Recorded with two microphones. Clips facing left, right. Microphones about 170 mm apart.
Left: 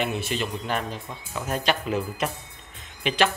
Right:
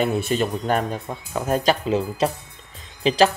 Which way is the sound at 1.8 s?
30° right (ahead or behind).